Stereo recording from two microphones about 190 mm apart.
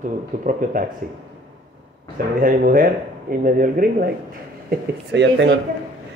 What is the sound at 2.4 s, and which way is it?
Speech, 50° right (ahead or behind).